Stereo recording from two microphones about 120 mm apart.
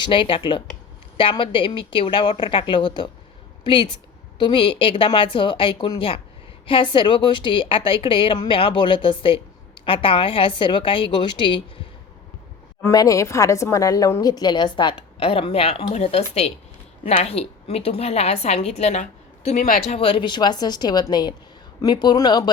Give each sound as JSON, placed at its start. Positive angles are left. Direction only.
{"t": 0.0, "sound": "a woman's voice", "side_deg": 45}
{"t": 12.9, "sound": "a woman's voice", "side_deg": 30}